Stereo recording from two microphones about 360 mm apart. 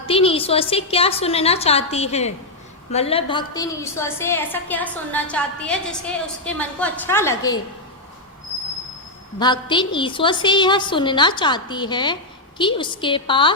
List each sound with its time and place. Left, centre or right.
0.0 s a woman's voice: centre
9.4 s a woman's voice: centre